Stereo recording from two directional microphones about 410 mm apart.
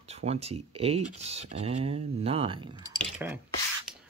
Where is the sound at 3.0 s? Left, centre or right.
Centre.